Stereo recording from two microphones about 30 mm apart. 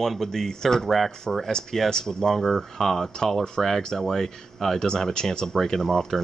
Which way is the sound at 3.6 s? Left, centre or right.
Centre.